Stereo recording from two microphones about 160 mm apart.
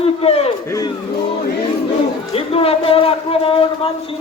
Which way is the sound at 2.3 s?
35° left (ahead or behind).